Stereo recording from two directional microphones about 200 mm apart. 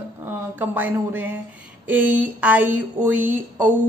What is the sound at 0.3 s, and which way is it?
A woman's voice, 10° right (ahead or behind).